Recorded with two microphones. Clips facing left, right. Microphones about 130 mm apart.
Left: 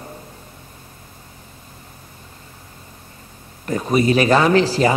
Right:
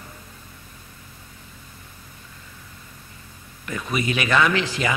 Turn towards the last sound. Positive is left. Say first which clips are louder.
# left 8 dB
turn(degrees=35)  # may be behind; listen again after turning